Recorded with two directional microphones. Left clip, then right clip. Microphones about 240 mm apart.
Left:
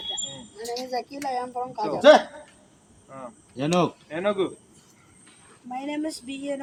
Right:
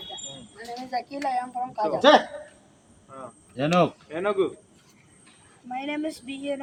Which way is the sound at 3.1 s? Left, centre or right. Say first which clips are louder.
Left 1 dB; left.